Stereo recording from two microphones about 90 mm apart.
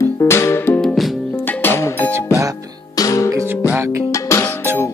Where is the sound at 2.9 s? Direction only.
40° left (ahead or behind).